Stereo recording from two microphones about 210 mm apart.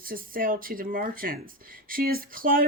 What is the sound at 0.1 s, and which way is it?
Speech, 40° right (ahead or behind).